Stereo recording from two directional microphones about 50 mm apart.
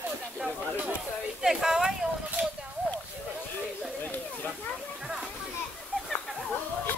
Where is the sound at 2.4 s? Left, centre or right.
Right.